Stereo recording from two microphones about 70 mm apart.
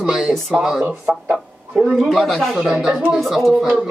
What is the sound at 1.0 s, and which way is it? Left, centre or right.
Speech, centre.